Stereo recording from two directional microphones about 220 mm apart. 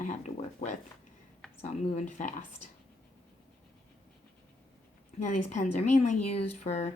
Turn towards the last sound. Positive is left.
turn(degrees=30)  # may be behind; listen again after turning